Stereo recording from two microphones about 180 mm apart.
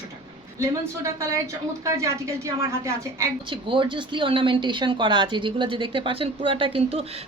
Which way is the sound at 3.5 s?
25° right (ahead or behind).